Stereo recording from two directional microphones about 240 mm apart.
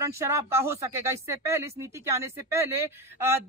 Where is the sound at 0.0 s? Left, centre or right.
Centre.